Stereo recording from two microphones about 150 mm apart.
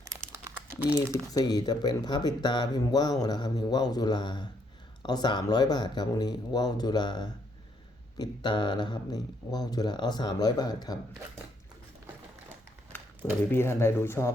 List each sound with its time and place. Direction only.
0.0 s crumpling: 20° right (ahead or behind)
1.1 s speech: 25° left (ahead or behind)
13.5 s speech: 15° left (ahead or behind)